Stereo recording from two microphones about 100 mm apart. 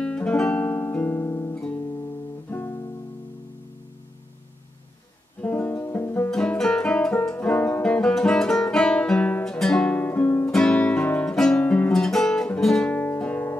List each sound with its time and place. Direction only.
0.0 s guitar: 10° left (ahead or behind)
5.4 s music: 15° left (ahead or behind)
6.3 s guitar: 5° left (ahead or behind)
10.5 s guitar: 5° left (ahead or behind)
11.6 s guitar: 15° left (ahead or behind)
11.9 s guitar: 5° left (ahead or behind)
12.5 s music: 5° left (ahead or behind)
12.9 s music: 15° left (ahead or behind)